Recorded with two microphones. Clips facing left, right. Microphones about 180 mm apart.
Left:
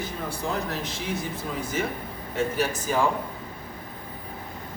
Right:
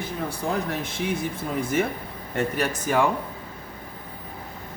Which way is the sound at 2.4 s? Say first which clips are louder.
Right 1 dB; 60° right (ahead or behind).